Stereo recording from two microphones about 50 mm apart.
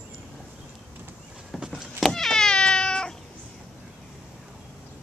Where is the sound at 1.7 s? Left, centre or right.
Centre.